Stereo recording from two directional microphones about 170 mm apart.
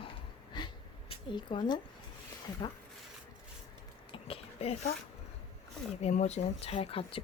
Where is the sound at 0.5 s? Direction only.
25° left (ahead or behind).